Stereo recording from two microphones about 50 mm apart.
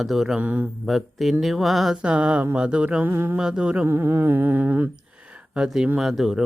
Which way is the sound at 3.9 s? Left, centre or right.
Right.